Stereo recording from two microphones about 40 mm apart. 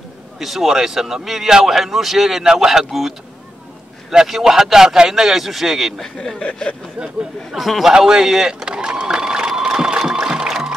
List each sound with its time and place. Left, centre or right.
0.4 s speech: centre
5.9 s speech: centre
7.0 s speech: right
7.5 s a man's voice: centre
7.9 s speech: centre
8.6 s a sound: right
10.3 s music: centre